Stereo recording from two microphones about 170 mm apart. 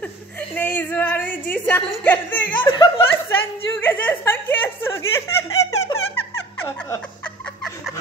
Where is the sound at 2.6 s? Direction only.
30° left (ahead or behind).